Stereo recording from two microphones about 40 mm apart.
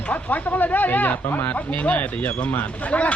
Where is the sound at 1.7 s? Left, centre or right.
Left.